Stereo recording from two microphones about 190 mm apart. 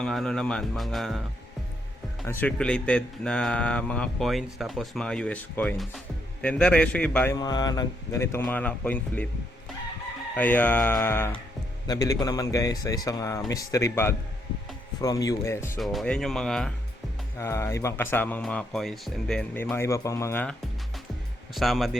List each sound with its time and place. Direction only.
0.0 s speech: centre (ahead or behind)
2.2 s speech: 10° left (ahead or behind)
7.3 s speech: 20° left (ahead or behind)
10.3 s speech: 10° left (ahead or behind)
15.8 s speech: centre (ahead or behind)
17.3 s speech: 15° left (ahead or behind)